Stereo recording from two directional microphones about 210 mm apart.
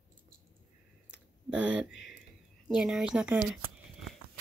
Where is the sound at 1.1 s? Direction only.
5° right (ahead or behind).